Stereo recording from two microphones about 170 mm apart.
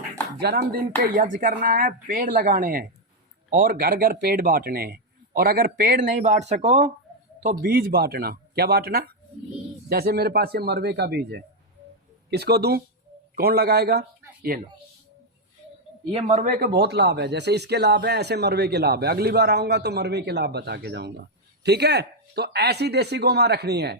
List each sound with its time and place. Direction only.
0.3 s speech: 65° right (ahead or behind); by 6.9 s 40° right (ahead or behind)
7.4 s speech: 55° right (ahead or behind)
14.5 s speech: 55° right (ahead or behind)
16.1 s speech: 40° right (ahead or behind); by 24.0 s 75° right (ahead or behind)